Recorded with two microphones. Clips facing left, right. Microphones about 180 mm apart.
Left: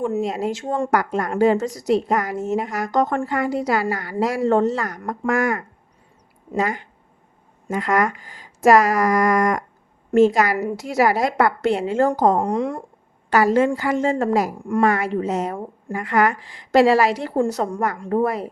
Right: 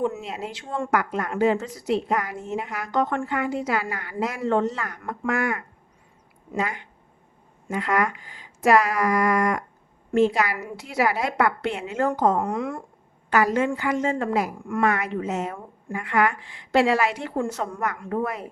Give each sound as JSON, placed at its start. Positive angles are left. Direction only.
{"t": 0.1, "sound": "a woman's voice", "side_deg": 40}